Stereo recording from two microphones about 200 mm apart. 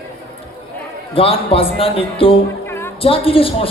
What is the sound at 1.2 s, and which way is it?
A man's voice, 30° left (ahead or behind).